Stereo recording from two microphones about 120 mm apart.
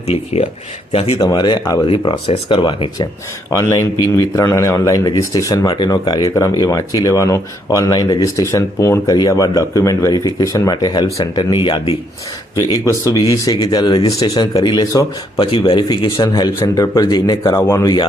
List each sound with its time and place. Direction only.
1.2 s speech: 35° left (ahead or behind)
1.9 s speech: 50° left (ahead or behind)
3.5 s speech: 25° left (ahead or behind); by 11.9 s 45° left (ahead or behind)
12.5 s speech: 30° left (ahead or behind)
15.4 s speech: 45° left (ahead or behind)
15.7 s speech: 35° left (ahead or behind)
17.4 s speech: 25° left (ahead or behind)